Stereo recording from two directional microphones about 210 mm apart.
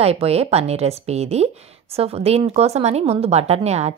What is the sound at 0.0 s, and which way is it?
A woman's voice, 30° right (ahead or behind).